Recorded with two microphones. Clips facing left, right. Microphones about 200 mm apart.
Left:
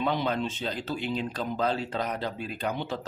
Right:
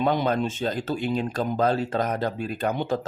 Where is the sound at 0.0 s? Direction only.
50° right (ahead or behind).